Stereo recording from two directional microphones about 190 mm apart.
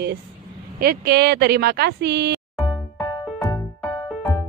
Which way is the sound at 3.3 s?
15° left (ahead or behind).